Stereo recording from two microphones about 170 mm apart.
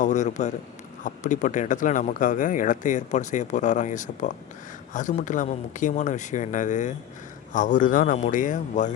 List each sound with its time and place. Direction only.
0.0 s speech: 45° left (ahead or behind)